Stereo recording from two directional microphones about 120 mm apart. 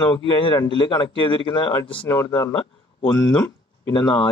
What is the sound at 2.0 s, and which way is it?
Speech, 30° left (ahead or behind).